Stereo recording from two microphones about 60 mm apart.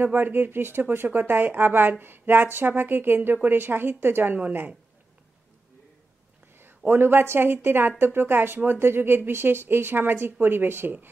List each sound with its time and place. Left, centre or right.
0.0 s speech: right
6.9 s speech: right